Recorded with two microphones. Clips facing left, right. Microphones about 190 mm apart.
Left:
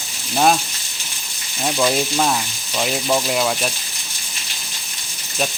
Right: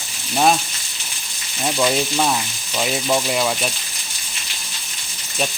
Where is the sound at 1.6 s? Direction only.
Centre (ahead or behind).